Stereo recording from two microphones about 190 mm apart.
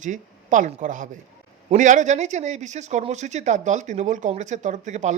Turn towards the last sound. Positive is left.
turn(degrees=-40)  # may be behind; listen again after turning